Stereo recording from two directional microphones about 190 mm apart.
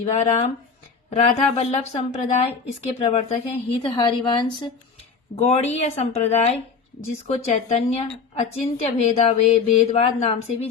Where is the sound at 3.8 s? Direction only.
25° left (ahead or behind).